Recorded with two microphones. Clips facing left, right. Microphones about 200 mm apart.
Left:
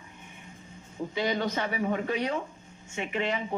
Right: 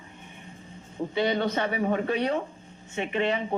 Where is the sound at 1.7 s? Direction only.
45° right (ahead or behind).